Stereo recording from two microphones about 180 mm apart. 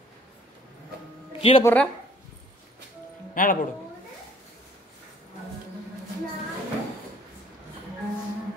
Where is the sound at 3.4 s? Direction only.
50° left (ahead or behind).